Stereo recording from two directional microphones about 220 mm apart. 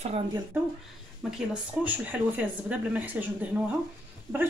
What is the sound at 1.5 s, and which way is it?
Speech, 5° right (ahead or behind).